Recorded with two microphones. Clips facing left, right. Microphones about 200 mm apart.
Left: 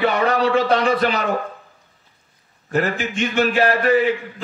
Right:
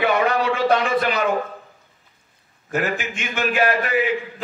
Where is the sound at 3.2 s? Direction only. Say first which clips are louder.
Left 4 dB; 40° left (ahead or behind).